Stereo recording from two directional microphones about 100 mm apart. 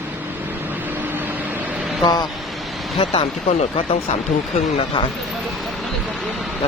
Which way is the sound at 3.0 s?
85° left.